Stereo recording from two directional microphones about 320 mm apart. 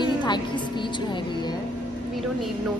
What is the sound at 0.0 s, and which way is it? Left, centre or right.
Music, centre.